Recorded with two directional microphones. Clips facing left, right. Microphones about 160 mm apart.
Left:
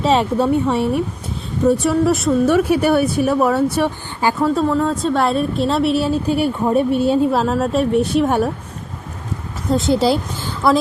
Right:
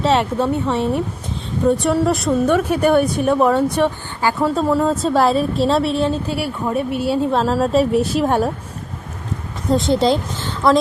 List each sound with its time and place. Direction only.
0.0 s speech: 10° left (ahead or behind)
1.6 s a woman's voice: centre (ahead or behind)
4.4 s a woman's voice: centre (ahead or behind)
6.2 s speech: 25° left (ahead or behind)
7.3 s a woman's voice: 5° left (ahead or behind)
9.6 s a woman's voice: centre (ahead or behind)